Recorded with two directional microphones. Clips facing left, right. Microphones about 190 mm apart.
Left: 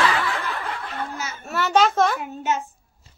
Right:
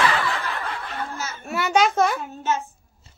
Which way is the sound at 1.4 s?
10° right (ahead or behind).